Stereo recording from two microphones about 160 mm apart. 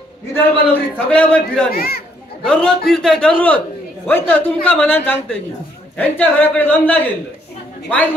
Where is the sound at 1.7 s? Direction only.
75° left (ahead or behind).